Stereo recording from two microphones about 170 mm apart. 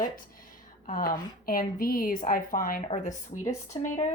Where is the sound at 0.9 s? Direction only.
55° left (ahead or behind).